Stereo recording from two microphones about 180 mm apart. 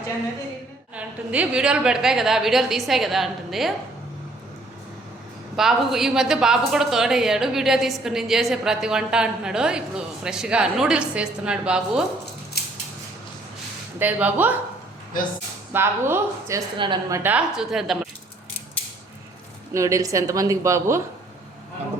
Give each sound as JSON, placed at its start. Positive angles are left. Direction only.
{"t": 0.9, "sound": "a woman's voice", "side_deg": -5}
{"t": 5.5, "sound": "a woman's voice", "side_deg": 0}
{"t": 12.6, "sound": "scissors", "side_deg": 60}
{"t": 14.0, "sound": "a woman's voice", "side_deg": -10}
{"t": 15.7, "sound": "a woman's voice", "side_deg": -15}
{"t": 19.7, "sound": "a woman's voice", "side_deg": -15}